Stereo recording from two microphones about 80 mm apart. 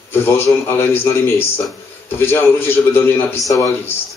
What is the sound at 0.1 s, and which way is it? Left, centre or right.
A man's voice, left.